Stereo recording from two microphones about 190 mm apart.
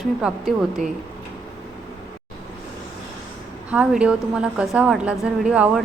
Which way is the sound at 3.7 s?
5° right (ahead or behind).